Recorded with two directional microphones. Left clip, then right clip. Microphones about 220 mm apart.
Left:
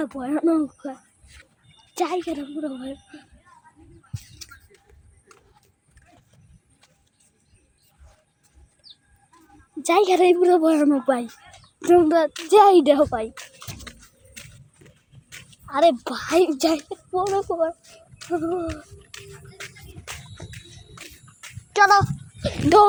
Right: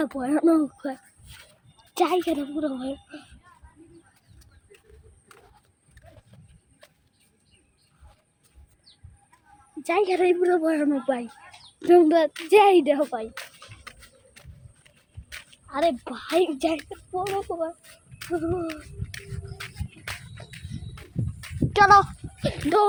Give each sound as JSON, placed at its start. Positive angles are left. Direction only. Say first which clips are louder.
{"t": 0.0, "sound": "speech", "louder": "right 1 dB", "side_deg": 0}
{"t": 1.7, "sound": "a sound", "louder": "left 3 dB", "side_deg": 5}
{"t": 2.0, "sound": "a woman's voice", "louder": "right 2 dB", "side_deg": -15}
{"t": 2.6, "sound": "speech", "louder": "right 2 dB", "side_deg": -5}
{"t": 9.8, "sound": "a woman's voice", "louder": "left 5 dB", "side_deg": 35}
{"t": 11.8, "sound": "speech", "louder": "left 1 dB", "side_deg": 5}
{"t": 12.8, "sound": "a child's voice", "louder": "left 5 dB", "side_deg": 30}
{"t": 13.9, "sound": "a sound", "louder": "left 2 dB", "side_deg": 0}
{"t": 14.8, "sound": "horse", "louder": "right 3 dB", "side_deg": 0}
{"t": 15.7, "sound": "a child's voice", "louder": "left 6 dB", "side_deg": 45}
{"t": 18.7, "sound": "a sound", "louder": "left 1 dB", "side_deg": -5}